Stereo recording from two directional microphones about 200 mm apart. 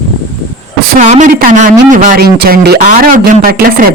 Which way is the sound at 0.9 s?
35° right (ahead or behind).